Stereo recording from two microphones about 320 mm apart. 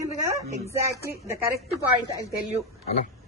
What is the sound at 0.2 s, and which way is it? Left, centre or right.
Speech, centre.